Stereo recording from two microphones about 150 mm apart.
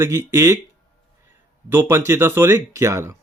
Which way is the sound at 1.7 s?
15° right (ahead or behind).